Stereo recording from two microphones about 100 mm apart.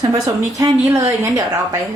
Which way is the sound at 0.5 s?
30° right (ahead or behind).